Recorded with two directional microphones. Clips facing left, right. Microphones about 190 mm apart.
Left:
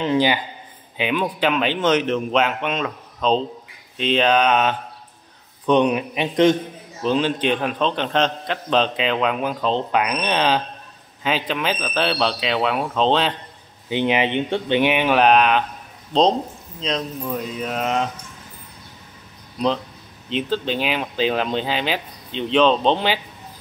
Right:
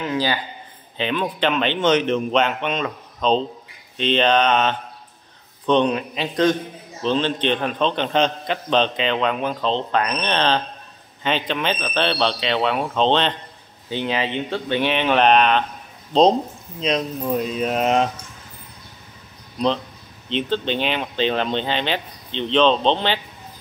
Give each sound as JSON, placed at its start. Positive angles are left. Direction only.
{"t": 0.0, "sound": "speech", "side_deg": 20}
{"t": 0.9, "sound": "a man's voice", "side_deg": 10}
{"t": 7.0, "sound": "a man's voice", "side_deg": 10}
{"t": 13.8, "sound": "a man's voice", "side_deg": 15}
{"t": 16.1, "sound": "speech", "side_deg": -5}
{"t": 16.8, "sound": "speech", "side_deg": -15}
{"t": 20.2, "sound": "speech", "side_deg": 5}